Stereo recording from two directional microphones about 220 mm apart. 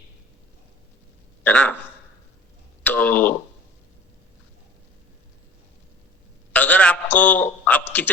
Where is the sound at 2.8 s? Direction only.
5° left (ahead or behind).